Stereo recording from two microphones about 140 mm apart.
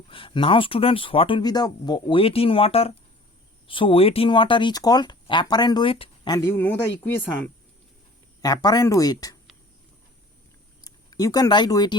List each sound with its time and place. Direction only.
0.1 s speech: 35° left (ahead or behind)
6.3 s speech: 15° left (ahead or behind)
8.4 s speech: 25° left (ahead or behind)
10.8 s speech: 25° left (ahead or behind)